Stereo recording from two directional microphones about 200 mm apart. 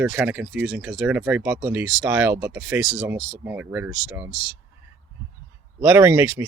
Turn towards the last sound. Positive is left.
turn(degrees=-10)  # may be behind; listen again after turning